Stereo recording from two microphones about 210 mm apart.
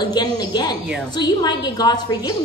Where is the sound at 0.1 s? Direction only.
20° left (ahead or behind).